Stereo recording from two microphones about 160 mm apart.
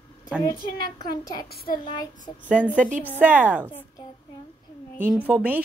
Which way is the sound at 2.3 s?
30° left (ahead or behind).